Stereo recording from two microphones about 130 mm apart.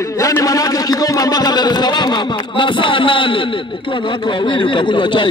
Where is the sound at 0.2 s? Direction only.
25° left (ahead or behind).